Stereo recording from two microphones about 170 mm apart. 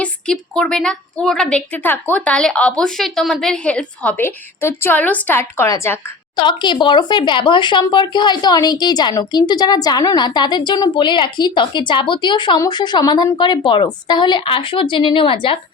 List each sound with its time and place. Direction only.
0.0 s a woman's voice: 5° left (ahead or behind); by 15.5 s 30° left (ahead or behind)